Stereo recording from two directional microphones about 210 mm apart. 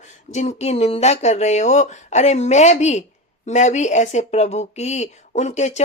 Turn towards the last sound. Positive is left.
turn(degrees=35)  # may be behind; listen again after turning